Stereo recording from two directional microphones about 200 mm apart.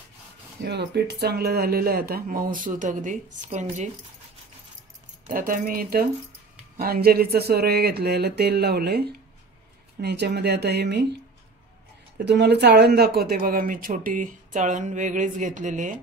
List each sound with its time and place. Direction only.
0.6 s speech: 55° right (ahead or behind); by 3.9 s 35° right (ahead or behind)
5.2 s speech: 40° right (ahead or behind)
12.3 s speech: 55° right (ahead or behind); by 16.0 s 40° right (ahead or behind)